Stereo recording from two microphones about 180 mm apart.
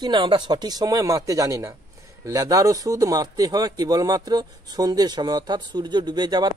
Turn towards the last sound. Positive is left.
turn(degrees=-25)  # may be behind; listen again after turning